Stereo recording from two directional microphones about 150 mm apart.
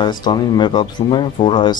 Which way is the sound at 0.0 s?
30° left (ahead or behind).